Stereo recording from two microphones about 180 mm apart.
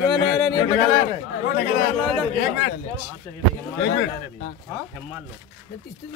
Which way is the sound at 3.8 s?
90° left.